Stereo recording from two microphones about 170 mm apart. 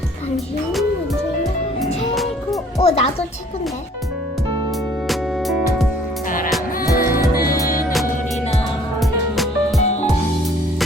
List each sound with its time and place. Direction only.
0.3 s speech: centre (ahead or behind)
2.7 s speech: 35° left (ahead or behind)
5.0 s music: centre (ahead or behind)
6.7 s music: 60° left (ahead or behind)
9.0 s music: centre (ahead or behind)
9.8 s music: 40° left (ahead or behind)